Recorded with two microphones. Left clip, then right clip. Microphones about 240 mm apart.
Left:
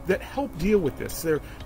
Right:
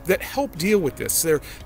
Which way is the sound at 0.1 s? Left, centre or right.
Centre.